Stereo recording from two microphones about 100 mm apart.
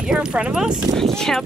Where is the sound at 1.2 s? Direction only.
5° left (ahead or behind).